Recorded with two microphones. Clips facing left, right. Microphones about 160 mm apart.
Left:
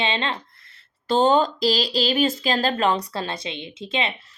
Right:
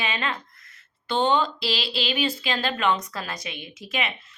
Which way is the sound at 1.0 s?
40° left (ahead or behind).